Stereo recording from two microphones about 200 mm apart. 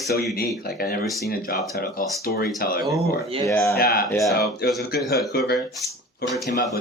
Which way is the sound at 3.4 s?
15° left (ahead or behind).